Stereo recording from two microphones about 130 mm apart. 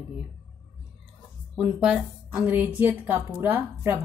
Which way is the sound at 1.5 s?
5° right (ahead or behind).